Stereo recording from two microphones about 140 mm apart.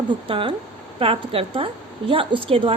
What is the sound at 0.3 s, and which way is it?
A woman's voice, 40° right (ahead or behind).